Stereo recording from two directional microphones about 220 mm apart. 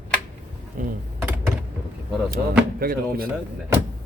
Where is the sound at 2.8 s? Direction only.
40° right (ahead or behind).